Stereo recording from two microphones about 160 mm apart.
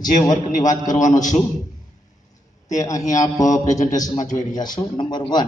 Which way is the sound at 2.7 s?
20° left (ahead or behind).